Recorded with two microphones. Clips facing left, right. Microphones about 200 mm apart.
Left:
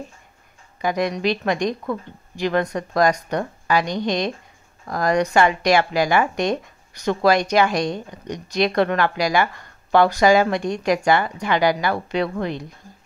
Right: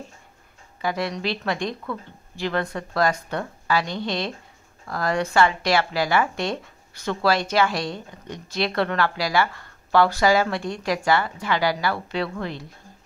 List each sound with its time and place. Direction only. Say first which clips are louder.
0.7 s a woman's voice: left 4 dB; 15° left (ahead or behind)